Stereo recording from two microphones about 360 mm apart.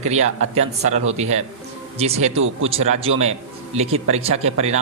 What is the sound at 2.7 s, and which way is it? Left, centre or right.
A man's voice, centre.